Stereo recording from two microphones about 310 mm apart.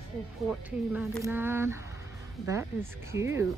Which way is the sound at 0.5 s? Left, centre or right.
Centre.